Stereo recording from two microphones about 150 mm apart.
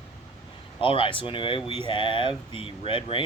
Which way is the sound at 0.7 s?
35° left (ahead or behind).